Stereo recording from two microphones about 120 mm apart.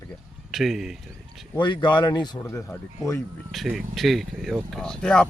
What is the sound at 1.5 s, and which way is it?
Speech, 40° left (ahead or behind).